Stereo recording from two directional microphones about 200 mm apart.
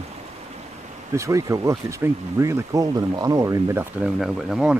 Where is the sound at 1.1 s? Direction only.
15° right (ahead or behind).